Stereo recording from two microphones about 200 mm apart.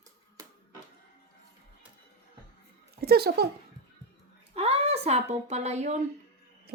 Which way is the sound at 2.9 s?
50° right (ahead or behind).